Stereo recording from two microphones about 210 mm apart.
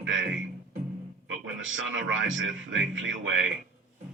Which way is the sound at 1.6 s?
65° right (ahead or behind).